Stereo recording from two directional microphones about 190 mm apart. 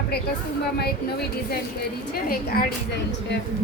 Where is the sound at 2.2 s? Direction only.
50° left (ahead or behind).